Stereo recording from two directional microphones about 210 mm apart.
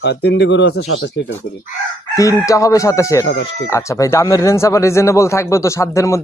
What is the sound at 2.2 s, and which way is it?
A man's voice, 15° left (ahead or behind).